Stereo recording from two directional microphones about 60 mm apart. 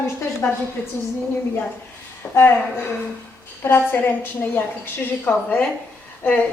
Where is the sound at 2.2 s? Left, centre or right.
Left.